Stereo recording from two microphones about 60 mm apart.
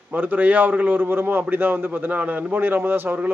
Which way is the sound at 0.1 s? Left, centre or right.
Right.